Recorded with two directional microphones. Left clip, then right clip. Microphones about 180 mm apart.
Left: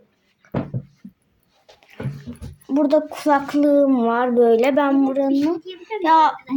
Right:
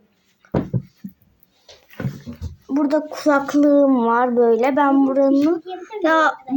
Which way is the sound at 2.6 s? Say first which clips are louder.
Left 2 dB; 10° left (ahead or behind).